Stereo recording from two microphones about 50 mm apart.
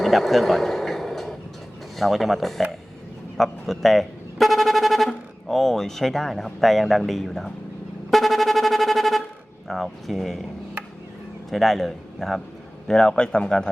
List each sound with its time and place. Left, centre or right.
0.0 s a sound: centre
2.0 s a man's voice: centre
8.1 s music: centre
9.6 s a man's voice: centre
11.5 s a man's voice: centre
12.9 s speech: centre